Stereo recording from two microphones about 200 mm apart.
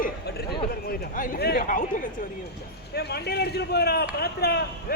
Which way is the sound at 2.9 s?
55° left (ahead or behind).